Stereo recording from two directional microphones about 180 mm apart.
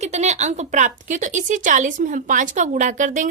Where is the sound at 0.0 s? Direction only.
40° right (ahead or behind).